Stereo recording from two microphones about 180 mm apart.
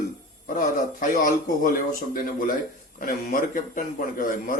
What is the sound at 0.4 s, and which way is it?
Music, 50° left (ahead or behind).